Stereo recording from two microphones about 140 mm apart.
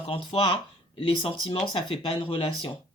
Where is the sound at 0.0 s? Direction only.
40° left (ahead or behind).